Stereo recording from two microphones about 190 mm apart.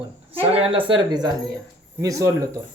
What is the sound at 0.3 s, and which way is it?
Speech, 30° right (ahead or behind).